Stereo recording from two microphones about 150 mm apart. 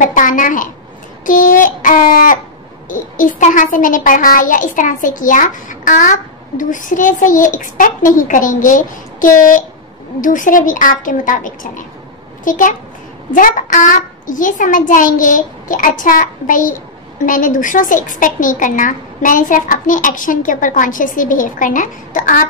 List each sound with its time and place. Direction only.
0.0 s a child's voice: 60° left (ahead or behind)